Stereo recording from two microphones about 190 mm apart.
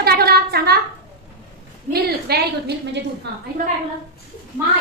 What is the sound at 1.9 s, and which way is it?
A woman's voice, 55° right (ahead or behind).